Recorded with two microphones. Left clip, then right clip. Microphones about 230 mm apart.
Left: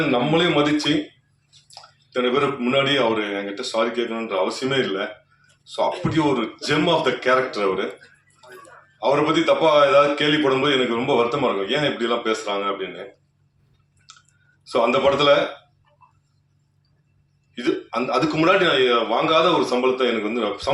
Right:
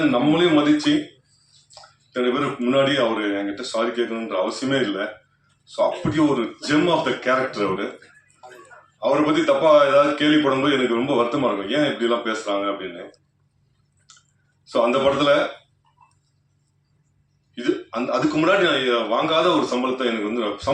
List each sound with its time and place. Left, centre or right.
0.1 s a man's voice: left
9.0 s a man's voice: left
14.1 s a sound: left
14.6 s a man's voice: left
17.5 s a man's voice: left